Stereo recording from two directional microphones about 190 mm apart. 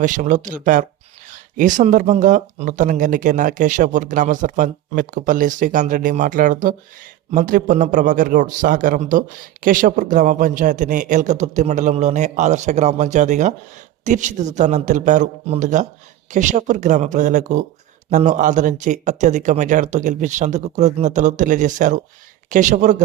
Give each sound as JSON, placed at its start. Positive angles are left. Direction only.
{"t": 0.0, "sound": "a man's voice", "side_deg": -40}